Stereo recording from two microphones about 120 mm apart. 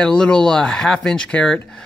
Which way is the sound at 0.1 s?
5° left (ahead or behind).